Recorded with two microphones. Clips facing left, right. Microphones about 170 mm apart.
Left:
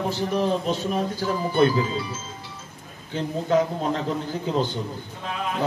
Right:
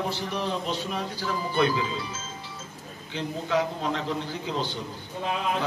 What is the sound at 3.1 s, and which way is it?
A man's voice, 45° left (ahead or behind).